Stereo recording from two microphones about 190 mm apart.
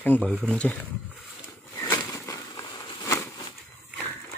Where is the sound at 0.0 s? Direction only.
10° left (ahead or behind).